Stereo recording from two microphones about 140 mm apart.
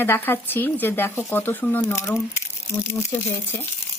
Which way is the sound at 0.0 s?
15° left (ahead or behind).